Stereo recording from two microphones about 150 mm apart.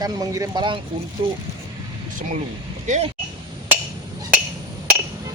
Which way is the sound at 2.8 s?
50° right (ahead or behind).